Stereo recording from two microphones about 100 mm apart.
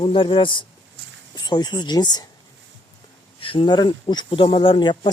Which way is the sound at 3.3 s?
60° left (ahead or behind).